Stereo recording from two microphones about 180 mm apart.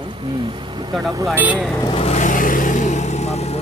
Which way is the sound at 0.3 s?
25° right (ahead or behind).